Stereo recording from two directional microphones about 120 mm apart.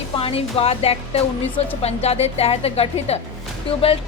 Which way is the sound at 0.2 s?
55° left (ahead or behind).